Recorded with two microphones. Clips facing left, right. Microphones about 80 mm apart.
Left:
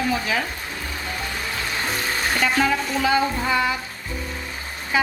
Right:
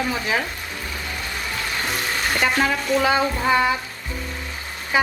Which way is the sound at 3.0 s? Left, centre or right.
Right.